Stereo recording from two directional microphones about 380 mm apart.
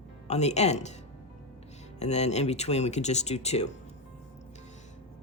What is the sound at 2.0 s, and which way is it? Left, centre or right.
Speech, centre.